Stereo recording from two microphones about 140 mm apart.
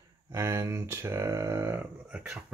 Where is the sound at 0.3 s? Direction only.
20° right (ahead or behind).